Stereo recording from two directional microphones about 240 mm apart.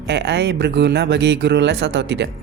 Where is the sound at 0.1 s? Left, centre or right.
Right.